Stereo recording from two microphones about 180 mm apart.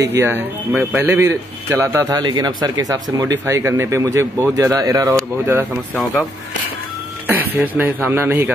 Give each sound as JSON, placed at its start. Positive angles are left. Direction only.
{"t": 0.0, "sound": "a man's voice", "side_deg": -15}
{"t": 7.2, "sound": "a man's voice", "side_deg": -10}